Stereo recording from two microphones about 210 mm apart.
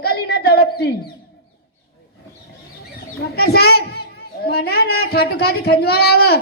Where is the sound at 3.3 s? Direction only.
50° left (ahead or behind).